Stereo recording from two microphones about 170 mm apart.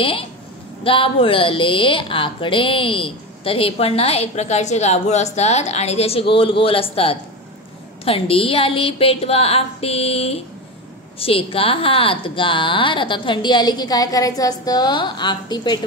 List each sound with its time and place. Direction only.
0.0 s a woman's voice: 30° left (ahead or behind)